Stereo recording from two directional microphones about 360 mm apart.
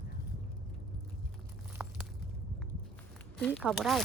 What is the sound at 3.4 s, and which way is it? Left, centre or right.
Speech, centre.